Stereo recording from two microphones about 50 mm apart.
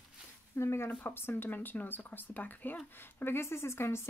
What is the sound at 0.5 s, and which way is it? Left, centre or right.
Speech, left.